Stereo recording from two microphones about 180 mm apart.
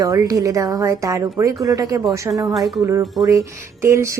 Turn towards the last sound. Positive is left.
turn(degrees=-15)  # may be behind; listen again after turning